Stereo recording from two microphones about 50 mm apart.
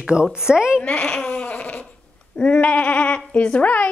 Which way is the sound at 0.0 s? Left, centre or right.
Centre.